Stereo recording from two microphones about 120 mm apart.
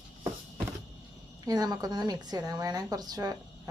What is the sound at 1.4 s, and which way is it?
A woman's voice, 35° right (ahead or behind).